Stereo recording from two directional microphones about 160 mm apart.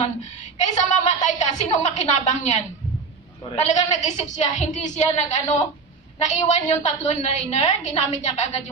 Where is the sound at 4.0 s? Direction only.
45° left (ahead or behind).